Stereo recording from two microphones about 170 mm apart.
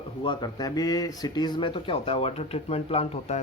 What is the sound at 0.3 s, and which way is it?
Speech, 25° left (ahead or behind).